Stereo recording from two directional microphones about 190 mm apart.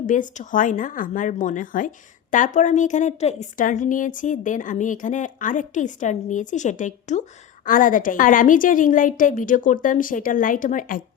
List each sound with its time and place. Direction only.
0.1 s a woman's voice: 45° left (ahead or behind)